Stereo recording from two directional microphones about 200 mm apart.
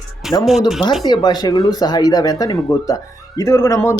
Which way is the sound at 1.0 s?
20° left (ahead or behind).